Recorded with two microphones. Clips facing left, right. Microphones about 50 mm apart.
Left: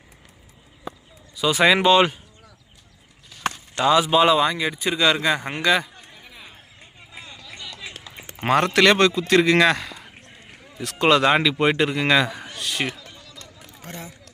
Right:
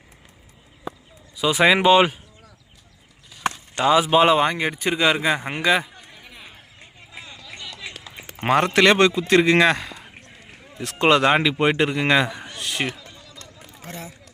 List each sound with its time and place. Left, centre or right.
1.4 s speech: centre
3.8 s speech: right
4.9 s a man's voice: centre
8.4 s a man's voice: centre
12.5 s a sound: right